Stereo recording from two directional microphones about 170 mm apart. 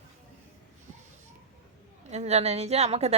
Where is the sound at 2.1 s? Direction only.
40° right (ahead or behind).